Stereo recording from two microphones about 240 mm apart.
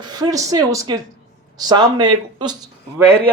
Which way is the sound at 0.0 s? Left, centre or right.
Centre.